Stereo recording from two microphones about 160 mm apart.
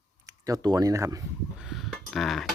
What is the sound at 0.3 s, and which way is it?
Speech, 20° right (ahead or behind).